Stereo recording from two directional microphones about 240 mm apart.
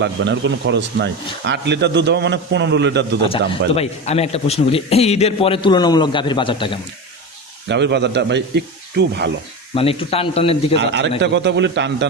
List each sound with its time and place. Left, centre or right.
0.0 s speech: right
3.2 s a man's voice: left
7.7 s speech: right
9.7 s a man's voice: left
10.8 s speech: right